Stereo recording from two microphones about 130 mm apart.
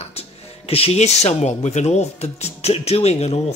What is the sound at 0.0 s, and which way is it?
Speech, 50° left (ahead or behind).